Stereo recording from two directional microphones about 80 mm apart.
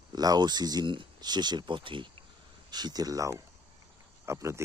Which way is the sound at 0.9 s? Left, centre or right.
Right.